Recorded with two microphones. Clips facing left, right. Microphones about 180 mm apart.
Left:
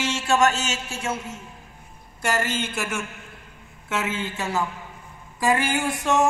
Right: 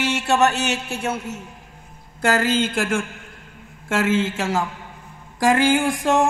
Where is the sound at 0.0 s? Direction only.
60° right (ahead or behind).